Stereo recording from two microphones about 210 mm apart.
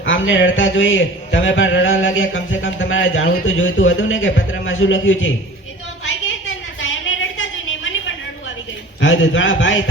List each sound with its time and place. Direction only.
0.0 s a man's voice: 65° left (ahead or behind)
7.3 s a sound: 65° left (ahead or behind)
9.0 s a man's voice: 65° left (ahead or behind)